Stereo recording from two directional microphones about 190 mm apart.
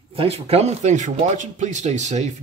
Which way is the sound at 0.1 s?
30° right (ahead or behind).